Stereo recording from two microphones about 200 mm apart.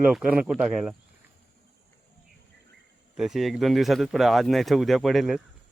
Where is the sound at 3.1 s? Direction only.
Centre (ahead or behind).